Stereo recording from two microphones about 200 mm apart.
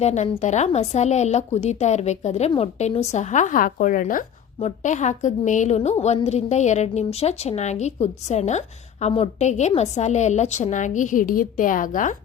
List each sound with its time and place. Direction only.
0.0 s a woman's voice: 35° left (ahead or behind)